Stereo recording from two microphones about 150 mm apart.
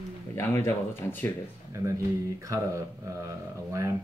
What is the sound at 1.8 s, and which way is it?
Speech, 30° right (ahead or behind).